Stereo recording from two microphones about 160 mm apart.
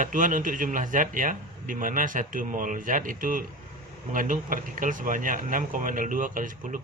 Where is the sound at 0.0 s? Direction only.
55° right (ahead or behind).